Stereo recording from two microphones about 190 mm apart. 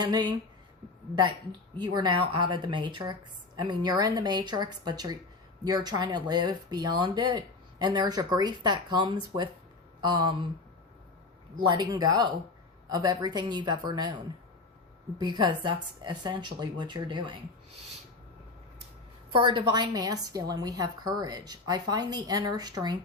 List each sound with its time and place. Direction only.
0.0 s speech: 25° right (ahead or behind)
1.8 s speech: 25° right (ahead or behind)
11.6 s speech: 25° right (ahead or behind)
15.2 s speech: 25° right (ahead or behind)
19.3 s speech: 25° right (ahead or behind)